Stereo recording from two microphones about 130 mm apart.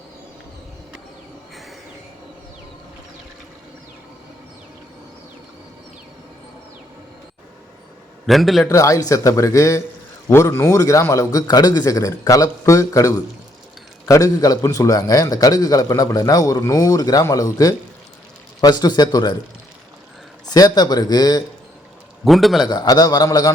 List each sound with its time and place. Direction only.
8.3 s a man's voice: centre (ahead or behind)
8.6 s a man's voice: 25° left (ahead or behind)
20.5 s speech: 30° left (ahead or behind)
22.2 s a man's voice: centre (ahead or behind)
22.6 s speech: 30° left (ahead or behind)